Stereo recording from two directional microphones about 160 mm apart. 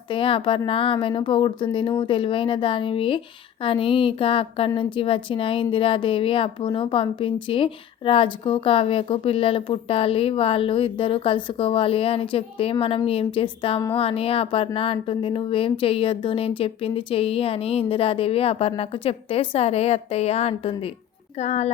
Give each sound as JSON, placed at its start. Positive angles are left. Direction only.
{"t": 0.1, "sound": "a woman's voice", "side_deg": 35}